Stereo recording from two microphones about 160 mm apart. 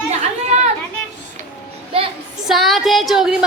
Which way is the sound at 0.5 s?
45° right (ahead or behind).